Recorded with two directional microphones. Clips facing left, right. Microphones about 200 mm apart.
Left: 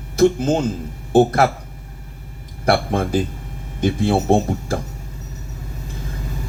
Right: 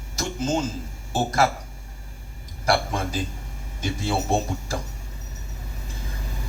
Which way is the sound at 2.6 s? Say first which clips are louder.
Left 6 dB; 55° left (ahead or behind).